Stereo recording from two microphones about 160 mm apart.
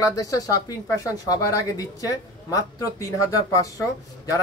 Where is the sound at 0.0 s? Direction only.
20° left (ahead or behind).